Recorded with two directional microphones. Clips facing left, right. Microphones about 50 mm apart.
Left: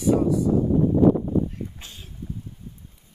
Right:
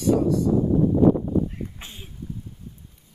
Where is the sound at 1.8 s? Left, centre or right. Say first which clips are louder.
Right 2 dB; right.